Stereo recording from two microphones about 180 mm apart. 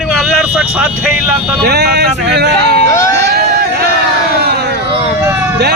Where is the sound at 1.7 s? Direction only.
65° right (ahead or behind).